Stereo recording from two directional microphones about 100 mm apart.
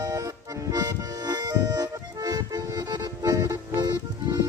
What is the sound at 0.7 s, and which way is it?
Accordion, 40° right (ahead or behind).